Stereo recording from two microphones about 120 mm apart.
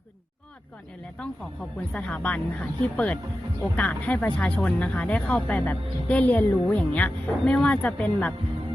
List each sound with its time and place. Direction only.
1.9 s speech: 10° left (ahead or behind)